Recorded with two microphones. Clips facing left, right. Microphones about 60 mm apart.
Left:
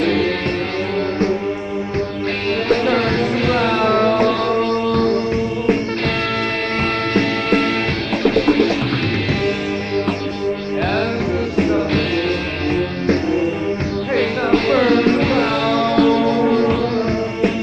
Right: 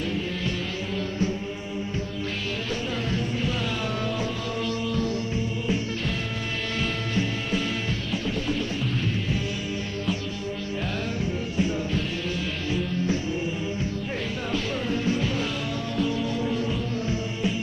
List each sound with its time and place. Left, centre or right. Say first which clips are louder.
0.0 s music: left 13 dB; left
2.7 s music: left 15 dB; left
8.2 s music: left 18 dB; left
11.5 s music: left 10 dB; left